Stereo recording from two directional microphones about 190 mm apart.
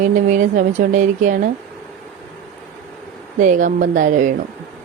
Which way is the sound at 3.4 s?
40° right (ahead or behind).